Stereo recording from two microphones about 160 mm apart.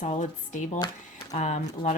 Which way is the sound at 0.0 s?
50° left (ahead or behind).